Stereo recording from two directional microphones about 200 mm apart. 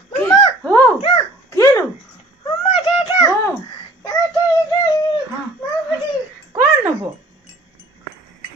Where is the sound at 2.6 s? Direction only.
25° left (ahead or behind).